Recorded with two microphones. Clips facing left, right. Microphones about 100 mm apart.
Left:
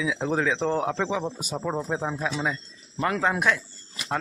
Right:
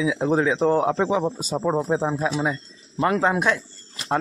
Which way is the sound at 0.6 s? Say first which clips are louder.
Right 6 dB; 35° right (ahead or behind).